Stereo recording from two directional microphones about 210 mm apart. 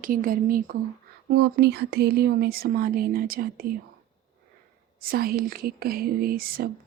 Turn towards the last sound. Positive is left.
turn(degrees=-45)  # may be behind; listen again after turning